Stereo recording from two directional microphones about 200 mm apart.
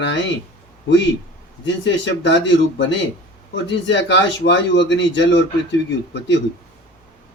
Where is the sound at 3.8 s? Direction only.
65° left (ahead or behind).